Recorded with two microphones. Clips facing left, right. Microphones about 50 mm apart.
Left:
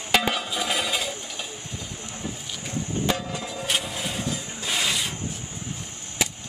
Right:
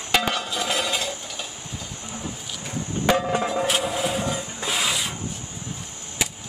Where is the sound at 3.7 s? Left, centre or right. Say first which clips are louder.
Right 5 dB; centre.